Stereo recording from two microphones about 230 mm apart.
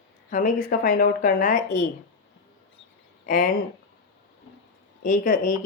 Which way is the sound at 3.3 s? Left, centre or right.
Left.